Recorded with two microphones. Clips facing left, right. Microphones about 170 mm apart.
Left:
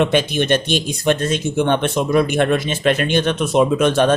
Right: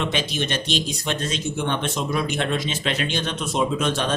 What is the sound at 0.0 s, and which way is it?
Speech, 55° left (ahead or behind).